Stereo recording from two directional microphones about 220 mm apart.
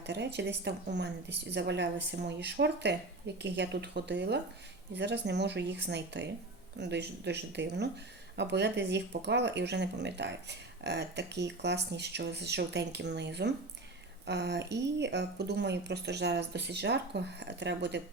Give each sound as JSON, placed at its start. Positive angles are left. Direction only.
{"t": 0.0, "sound": "speech", "side_deg": -50}